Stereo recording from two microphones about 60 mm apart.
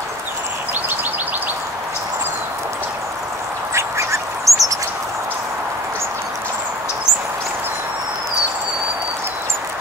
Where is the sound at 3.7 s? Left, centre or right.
Right.